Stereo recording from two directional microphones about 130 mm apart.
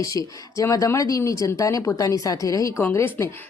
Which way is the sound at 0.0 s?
25° left (ahead or behind).